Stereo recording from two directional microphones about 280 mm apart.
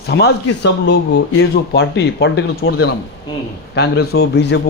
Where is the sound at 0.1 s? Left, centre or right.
Left.